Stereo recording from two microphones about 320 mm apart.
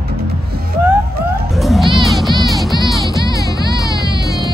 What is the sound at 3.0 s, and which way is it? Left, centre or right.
Music, centre.